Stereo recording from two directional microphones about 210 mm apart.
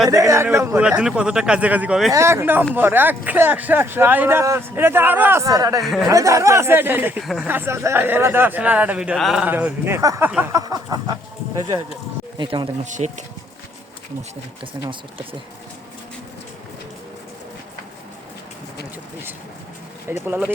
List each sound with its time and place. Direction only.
0.1 s speech: 15° right (ahead or behind)
5.8 s speech: centre (ahead or behind)
6.1 s speech: 15° right (ahead or behind)
12.4 s speech: 25° right (ahead or behind)
12.8 s speech: 35° right (ahead or behind)
20.2 s speech: 10° right (ahead or behind)